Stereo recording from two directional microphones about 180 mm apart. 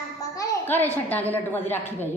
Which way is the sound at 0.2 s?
20° left (ahead or behind).